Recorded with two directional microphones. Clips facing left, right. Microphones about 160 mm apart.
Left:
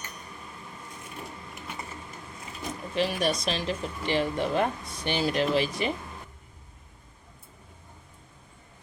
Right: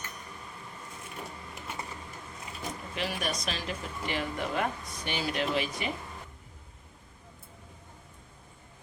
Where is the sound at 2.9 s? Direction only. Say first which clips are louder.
Left 8 dB; 30° left (ahead or behind).